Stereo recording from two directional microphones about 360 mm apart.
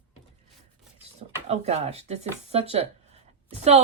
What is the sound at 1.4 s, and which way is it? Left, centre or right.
Speech, centre.